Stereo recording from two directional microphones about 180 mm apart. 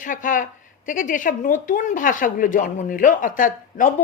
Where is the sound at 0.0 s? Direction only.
50° left (ahead or behind).